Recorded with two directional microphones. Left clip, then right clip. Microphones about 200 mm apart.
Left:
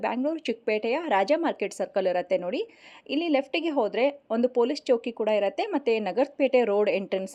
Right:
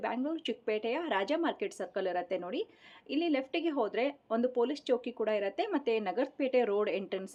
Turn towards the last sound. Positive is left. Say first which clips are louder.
# left 8 dB
turn(degrees=30)  # may be behind; listen again after turning